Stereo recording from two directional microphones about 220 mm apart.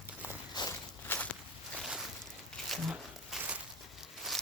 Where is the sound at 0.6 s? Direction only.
20° left (ahead or behind).